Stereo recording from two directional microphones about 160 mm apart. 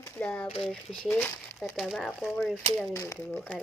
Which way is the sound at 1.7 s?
Centre (ahead or behind).